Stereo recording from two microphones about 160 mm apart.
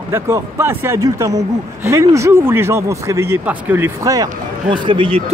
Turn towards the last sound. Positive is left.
turn(degrees=-30)  # may be behind; listen again after turning